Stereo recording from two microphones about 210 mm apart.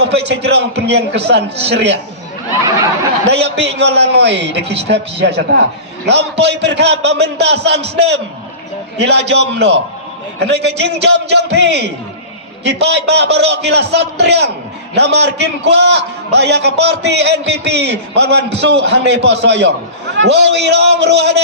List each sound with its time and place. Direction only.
0.0 s a man's voice: 55° right (ahead or behind)
2.6 s a sound: 15° right (ahead or behind)
3.2 s a man's voice: 55° right (ahead or behind)